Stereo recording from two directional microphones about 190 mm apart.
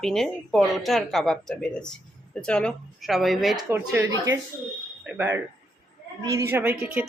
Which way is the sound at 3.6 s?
15° right (ahead or behind).